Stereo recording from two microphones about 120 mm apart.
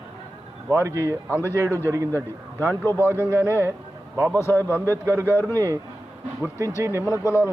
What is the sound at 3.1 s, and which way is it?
Speech, 20° right (ahead or behind).